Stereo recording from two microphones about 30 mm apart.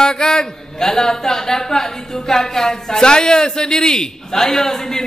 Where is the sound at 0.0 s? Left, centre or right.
Left.